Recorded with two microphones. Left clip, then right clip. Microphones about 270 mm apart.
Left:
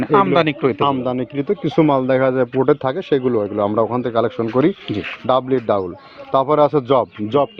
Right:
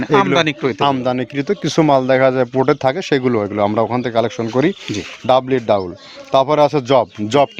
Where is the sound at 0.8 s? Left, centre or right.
Right.